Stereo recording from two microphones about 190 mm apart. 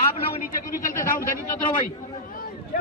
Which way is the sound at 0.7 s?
45° left (ahead or behind).